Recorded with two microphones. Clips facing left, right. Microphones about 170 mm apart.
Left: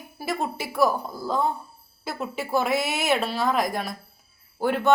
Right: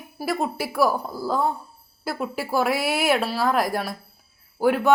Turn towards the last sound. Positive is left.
turn(degrees=-5)  # may be behind; listen again after turning